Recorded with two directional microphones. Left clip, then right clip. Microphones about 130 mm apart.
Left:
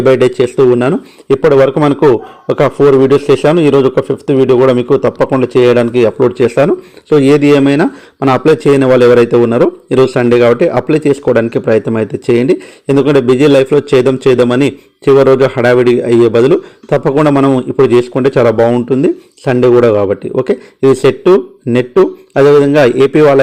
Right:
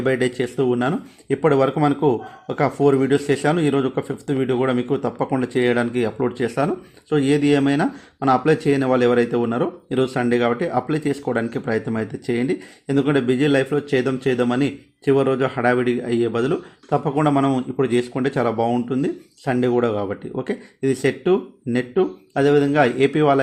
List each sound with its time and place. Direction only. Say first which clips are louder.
0.0 s a man's voice: left 13 dB; 35° left (ahead or behind)